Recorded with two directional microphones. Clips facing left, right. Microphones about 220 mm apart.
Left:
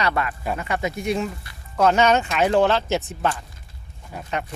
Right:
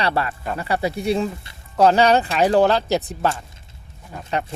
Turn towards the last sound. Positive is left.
turn(degrees=-35)  # may be behind; listen again after turning